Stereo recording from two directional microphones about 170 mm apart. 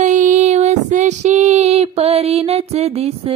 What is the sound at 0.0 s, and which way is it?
Female singing, 45° right (ahead or behind).